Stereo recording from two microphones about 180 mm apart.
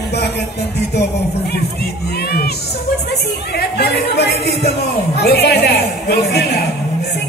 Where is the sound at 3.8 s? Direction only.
70° left (ahead or behind).